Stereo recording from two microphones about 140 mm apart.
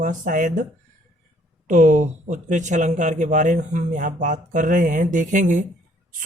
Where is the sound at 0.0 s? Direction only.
70° right (ahead or behind).